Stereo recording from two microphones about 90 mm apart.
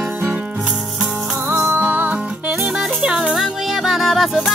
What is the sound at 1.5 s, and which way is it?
Music, 25° right (ahead or behind).